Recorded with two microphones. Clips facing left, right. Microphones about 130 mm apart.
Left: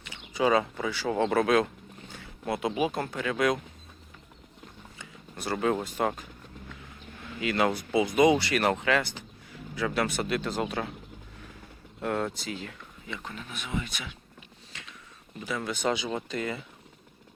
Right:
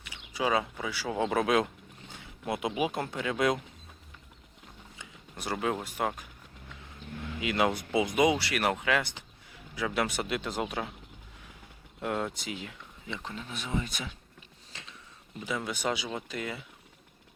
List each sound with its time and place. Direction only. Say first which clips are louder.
0.0 s speech: left 5 dB; 5° right (ahead or behind); by 3.6 s 20° right (ahead or behind)
4.9 s speech: left 3 dB; 15° right (ahead or behind)
7.3 s speech: left 2 dB; 15° right (ahead or behind)
12.0 s speech: left 2 dB; 15° right (ahead or behind); by 14.2 s 35° right (ahead or behind)
14.7 s a sound: even; 30° right (ahead or behind)
15.4 s speech: left 3 dB; 15° right (ahead or behind)